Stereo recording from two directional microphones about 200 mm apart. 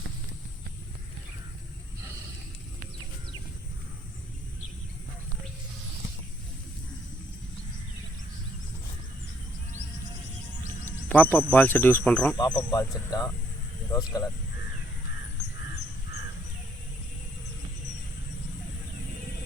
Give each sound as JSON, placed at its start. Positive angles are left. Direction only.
{"t": 11.1, "sound": "speech", "side_deg": 10}
{"t": 12.4, "sound": "speech", "side_deg": 20}